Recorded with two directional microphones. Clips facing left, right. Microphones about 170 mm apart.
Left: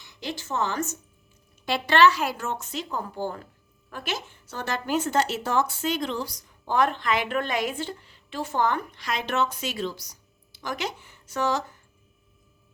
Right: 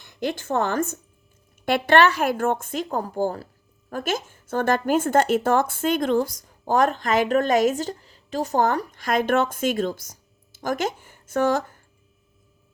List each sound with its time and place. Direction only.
0.0 s a woman's voice: 50° right (ahead or behind)